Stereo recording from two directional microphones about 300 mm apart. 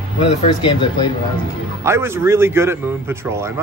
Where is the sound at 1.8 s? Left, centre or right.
Centre.